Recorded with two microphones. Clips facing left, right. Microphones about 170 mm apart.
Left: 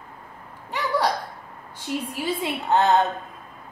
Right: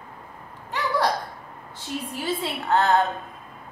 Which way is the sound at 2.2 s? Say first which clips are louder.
Even; 20° left (ahead or behind).